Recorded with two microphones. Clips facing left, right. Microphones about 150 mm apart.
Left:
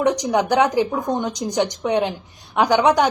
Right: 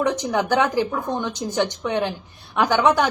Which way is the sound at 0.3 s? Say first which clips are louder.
Left 3 dB; 15° left (ahead or behind).